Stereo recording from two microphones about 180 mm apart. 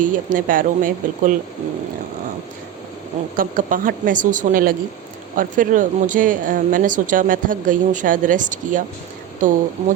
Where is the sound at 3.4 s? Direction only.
50° right (ahead or behind).